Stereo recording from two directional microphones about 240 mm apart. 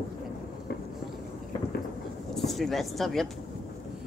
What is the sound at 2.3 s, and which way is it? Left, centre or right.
Speech, centre.